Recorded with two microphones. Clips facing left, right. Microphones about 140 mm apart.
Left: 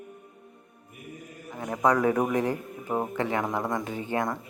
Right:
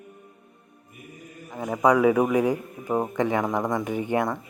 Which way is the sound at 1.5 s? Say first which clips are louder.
Right 4 dB; 10° right (ahead or behind).